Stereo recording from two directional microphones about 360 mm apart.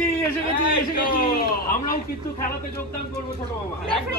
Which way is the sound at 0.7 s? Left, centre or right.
Left.